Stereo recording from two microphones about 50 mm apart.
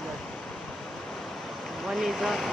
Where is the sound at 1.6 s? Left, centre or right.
Centre.